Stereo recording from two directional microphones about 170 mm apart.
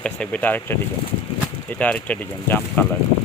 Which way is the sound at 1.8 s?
10° left (ahead or behind).